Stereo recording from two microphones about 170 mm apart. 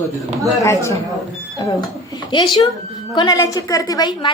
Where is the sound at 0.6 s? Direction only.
15° left (ahead or behind).